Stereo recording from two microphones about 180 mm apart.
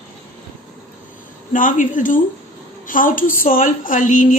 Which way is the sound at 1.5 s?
45° left (ahead or behind).